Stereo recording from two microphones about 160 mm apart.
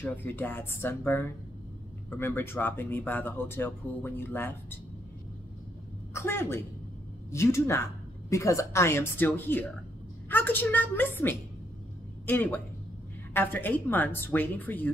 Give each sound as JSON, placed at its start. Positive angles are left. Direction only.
{"t": 0.0, "sound": "speech", "side_deg": 10}
{"t": 6.1, "sound": "speech", "side_deg": 15}